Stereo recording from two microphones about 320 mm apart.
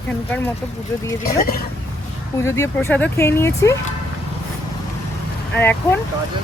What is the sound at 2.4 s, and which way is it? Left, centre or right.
Speech, centre.